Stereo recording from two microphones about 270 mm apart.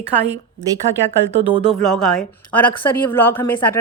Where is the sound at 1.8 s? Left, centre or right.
Centre.